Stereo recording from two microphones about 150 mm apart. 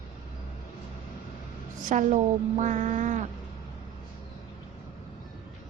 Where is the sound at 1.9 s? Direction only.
55° right (ahead or behind).